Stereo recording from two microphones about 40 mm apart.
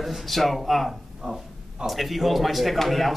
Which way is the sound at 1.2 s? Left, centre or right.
Centre.